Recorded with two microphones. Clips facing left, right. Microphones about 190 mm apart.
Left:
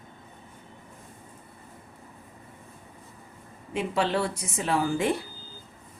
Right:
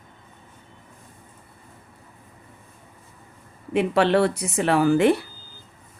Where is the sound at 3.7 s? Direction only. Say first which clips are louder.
Right 7 dB; 65° right (ahead or behind).